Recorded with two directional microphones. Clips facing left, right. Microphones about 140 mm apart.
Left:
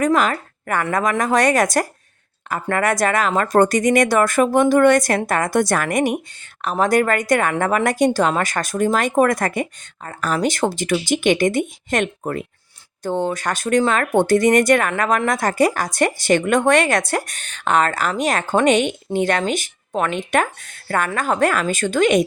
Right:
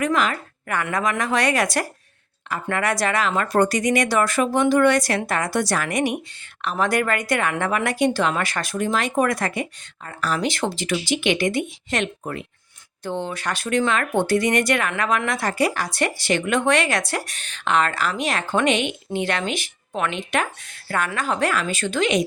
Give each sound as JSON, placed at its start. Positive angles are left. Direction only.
{"t": 0.0, "sound": "speech", "side_deg": 40}